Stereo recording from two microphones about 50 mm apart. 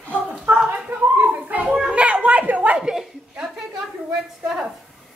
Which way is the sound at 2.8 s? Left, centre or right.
Centre.